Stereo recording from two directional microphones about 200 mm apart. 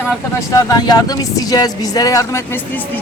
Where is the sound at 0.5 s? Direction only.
20° left (ahead or behind).